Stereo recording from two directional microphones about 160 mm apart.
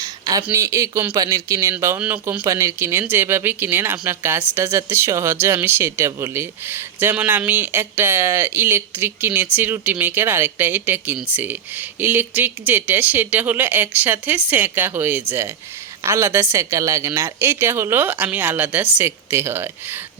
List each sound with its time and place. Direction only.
0.0 s a sound: 20° right (ahead or behind)
0.4 s speech: 20° right (ahead or behind)
2.4 s speech: 20° right (ahead or behind)